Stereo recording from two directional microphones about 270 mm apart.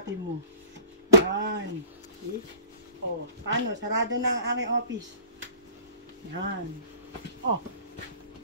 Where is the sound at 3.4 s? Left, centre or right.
Right.